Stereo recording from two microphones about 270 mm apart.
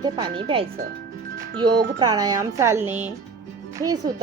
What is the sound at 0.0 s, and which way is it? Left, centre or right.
Speech, centre.